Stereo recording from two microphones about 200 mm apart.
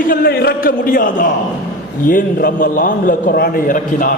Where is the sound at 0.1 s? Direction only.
50° left (ahead or behind).